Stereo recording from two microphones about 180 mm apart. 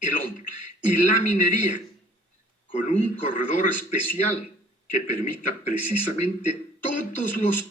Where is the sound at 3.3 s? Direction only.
45° left (ahead or behind).